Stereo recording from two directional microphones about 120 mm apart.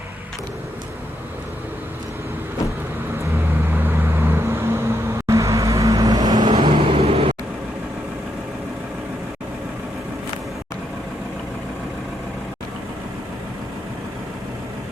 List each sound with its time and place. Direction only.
3.7 s vehicle: 15° right (ahead or behind); by 7.3 s 55° right (ahead or behind)